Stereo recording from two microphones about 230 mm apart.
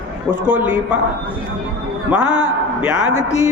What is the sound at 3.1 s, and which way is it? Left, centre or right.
Speech, left.